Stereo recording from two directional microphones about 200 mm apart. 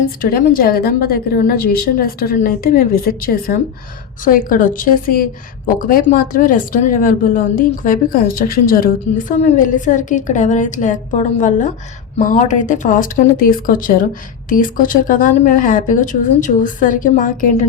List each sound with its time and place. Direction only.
0.2 s a woman's voice: 45° left (ahead or behind)